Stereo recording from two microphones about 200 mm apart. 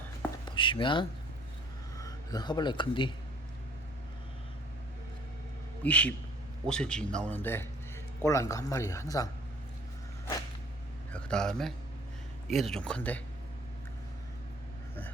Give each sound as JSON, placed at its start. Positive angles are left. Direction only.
{"t": 0.4, "sound": "speech", "side_deg": 25}
{"t": 5.8, "sound": "a man's voice", "side_deg": 5}
{"t": 11.1, "sound": "a man's voice", "side_deg": 5}